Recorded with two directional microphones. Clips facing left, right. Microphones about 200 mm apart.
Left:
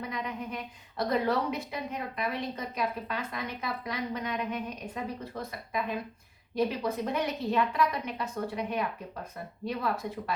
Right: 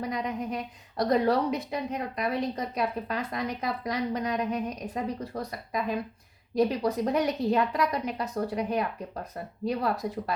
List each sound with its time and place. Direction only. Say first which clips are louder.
0.0 s a woman's voice: right 5 dB; 40° right (ahead or behind)